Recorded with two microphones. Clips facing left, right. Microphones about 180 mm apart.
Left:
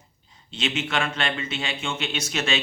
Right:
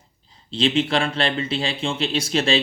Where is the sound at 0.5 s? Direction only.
30° right (ahead or behind).